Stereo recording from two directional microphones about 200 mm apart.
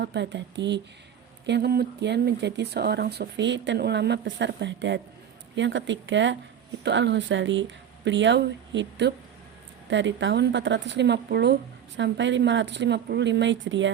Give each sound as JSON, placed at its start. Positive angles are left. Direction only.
{"t": 0.0, "sound": "speech", "side_deg": -60}